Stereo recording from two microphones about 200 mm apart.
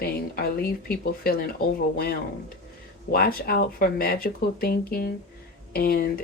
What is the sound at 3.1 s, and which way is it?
Speech, 50° left (ahead or behind).